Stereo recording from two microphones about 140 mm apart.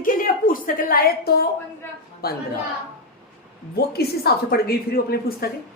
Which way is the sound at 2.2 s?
90° left.